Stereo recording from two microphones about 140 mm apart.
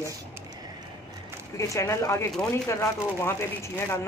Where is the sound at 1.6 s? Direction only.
20° left (ahead or behind).